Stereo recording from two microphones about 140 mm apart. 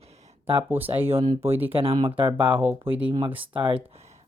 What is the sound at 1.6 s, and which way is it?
Speech, 40° right (ahead or behind).